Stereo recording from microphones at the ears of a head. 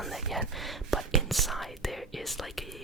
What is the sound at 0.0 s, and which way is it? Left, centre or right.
Whispering, centre.